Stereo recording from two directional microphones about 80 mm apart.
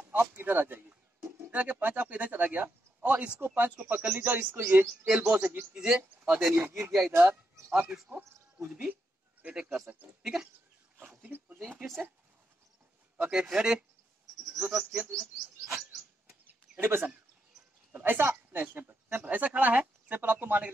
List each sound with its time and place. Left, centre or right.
0.1 s a woman's voice: right
5.7 s speech: centre
6.5 s a woman's voice: right
6.8 s speech: centre
7.1 s a woman's voice: right
8.6 s speech: centre
11.0 s a sound: right
13.2 s speech: centre
16.4 s bird: right
17.9 s a woman's voice: right